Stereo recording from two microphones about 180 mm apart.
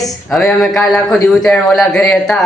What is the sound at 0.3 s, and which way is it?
A man's voice, centre (ahead or behind).